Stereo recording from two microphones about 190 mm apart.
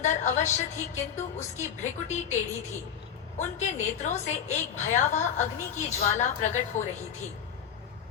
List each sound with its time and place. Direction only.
0.0 s a woman's voice: 40° left (ahead or behind)